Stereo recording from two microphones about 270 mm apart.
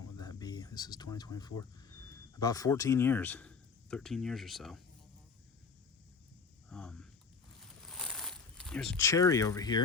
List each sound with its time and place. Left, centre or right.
0.0 s speech: centre
6.7 s a sound: centre
7.9 s crumpling: centre